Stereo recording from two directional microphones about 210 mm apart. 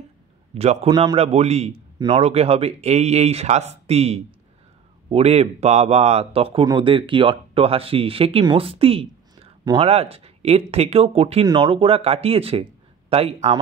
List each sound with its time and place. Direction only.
0.6 s speech: 25° right (ahead or behind)